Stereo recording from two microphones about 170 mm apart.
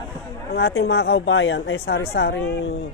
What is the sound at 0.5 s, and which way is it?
Speech, 70° left (ahead or behind).